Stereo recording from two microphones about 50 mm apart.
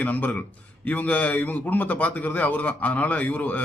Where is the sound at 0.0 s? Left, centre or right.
Left.